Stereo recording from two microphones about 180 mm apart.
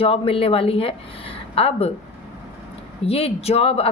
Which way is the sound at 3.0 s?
35° left (ahead or behind).